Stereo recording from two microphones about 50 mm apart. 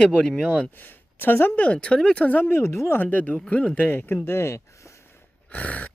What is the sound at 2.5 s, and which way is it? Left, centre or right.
Speech, left.